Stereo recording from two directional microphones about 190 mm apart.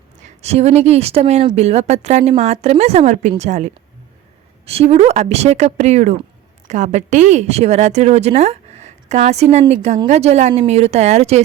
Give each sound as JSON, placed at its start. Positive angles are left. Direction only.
{"t": 0.2, "sound": "speech", "side_deg": -35}